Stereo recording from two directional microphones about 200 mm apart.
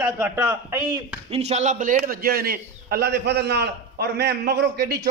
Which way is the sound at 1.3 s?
35° right (ahead or behind).